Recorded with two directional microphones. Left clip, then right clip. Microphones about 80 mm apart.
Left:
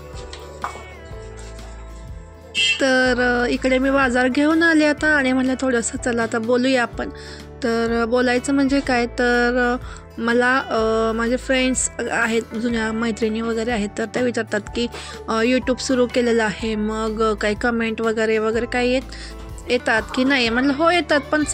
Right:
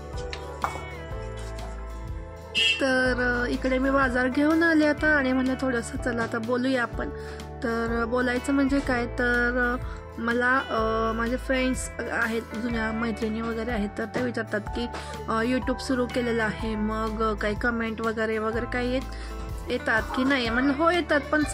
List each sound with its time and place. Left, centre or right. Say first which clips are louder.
2.8 s speech: left 7 dB; left